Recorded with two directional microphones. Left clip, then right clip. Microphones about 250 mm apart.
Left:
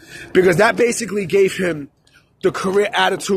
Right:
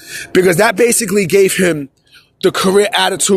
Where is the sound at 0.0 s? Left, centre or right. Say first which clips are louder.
Right 3 dB; right.